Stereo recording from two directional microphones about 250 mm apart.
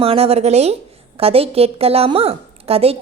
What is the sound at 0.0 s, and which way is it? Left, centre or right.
A woman's voice, right.